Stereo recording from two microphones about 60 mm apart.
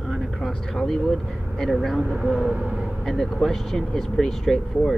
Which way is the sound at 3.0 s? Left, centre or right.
Centre.